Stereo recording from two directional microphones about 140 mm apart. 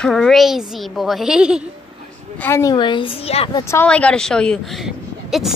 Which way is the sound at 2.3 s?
15° left (ahead or behind).